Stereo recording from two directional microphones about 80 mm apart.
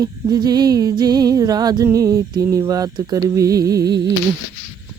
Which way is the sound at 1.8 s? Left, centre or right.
Right.